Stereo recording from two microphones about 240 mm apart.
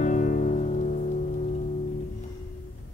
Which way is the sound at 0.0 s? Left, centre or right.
Left.